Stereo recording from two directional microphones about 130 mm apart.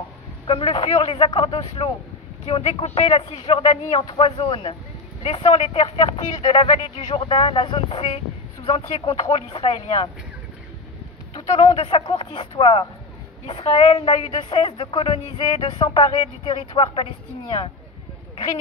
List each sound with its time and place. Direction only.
0.5 s speech: 45° left (ahead or behind)
11.3 s a woman's voice: 50° left (ahead or behind)